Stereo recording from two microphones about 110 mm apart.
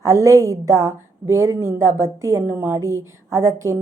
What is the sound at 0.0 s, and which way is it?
A woman's voice, 25° right (ahead or behind).